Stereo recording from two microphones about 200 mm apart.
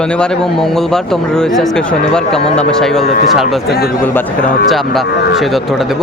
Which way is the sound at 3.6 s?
50° left (ahead or behind).